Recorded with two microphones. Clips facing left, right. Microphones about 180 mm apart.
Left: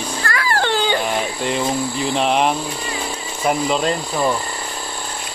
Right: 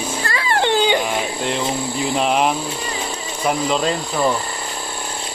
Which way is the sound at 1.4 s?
Centre (ahead or behind).